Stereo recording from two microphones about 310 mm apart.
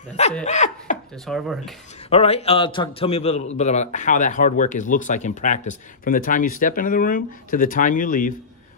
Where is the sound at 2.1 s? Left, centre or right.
Centre.